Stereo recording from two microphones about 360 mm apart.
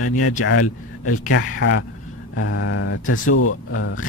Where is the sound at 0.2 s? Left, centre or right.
Left.